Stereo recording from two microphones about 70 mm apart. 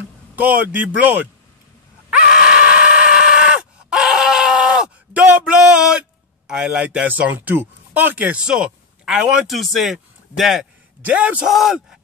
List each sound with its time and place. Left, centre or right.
0.4 s speech: right
2.0 s screaming: centre
5.4 s a sound: centre
9.5 s speech: centre
11.1 s a man's voice: centre
11.4 s speech: centre